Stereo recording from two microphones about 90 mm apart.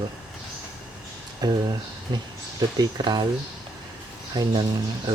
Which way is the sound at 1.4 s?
45° right (ahead or behind).